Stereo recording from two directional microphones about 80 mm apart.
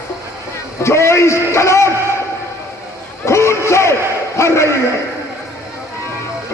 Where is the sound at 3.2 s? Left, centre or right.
Left.